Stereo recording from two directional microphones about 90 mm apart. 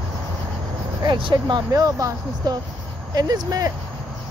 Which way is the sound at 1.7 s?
40° right (ahead or behind).